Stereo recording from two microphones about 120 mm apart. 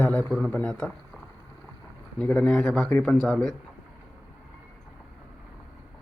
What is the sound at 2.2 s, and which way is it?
Speech, 10° left (ahead or behind).